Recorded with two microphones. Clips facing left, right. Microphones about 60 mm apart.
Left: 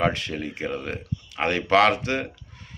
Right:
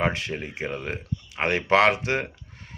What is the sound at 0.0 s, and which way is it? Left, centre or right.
Speech, right.